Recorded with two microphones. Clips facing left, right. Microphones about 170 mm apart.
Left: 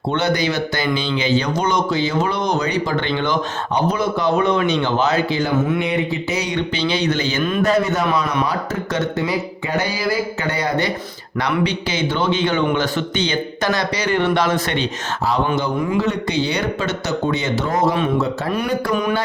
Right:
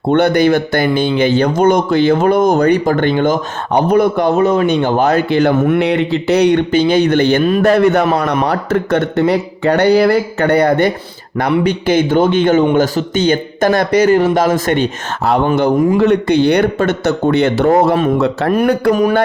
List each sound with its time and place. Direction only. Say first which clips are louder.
0.1 s speech: right 9 dB; 55° right (ahead or behind)
4.4 s speech: right 5 dB; 40° right (ahead or behind)